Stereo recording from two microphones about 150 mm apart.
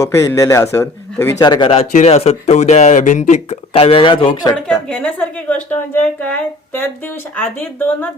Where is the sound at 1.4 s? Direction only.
30° left (ahead or behind).